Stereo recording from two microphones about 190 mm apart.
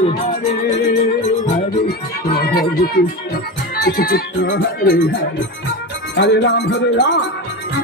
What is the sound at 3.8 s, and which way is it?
Music, 50° left (ahead or behind).